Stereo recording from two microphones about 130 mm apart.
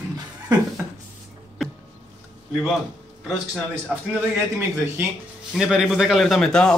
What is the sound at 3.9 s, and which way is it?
Speech, 5° right (ahead or behind).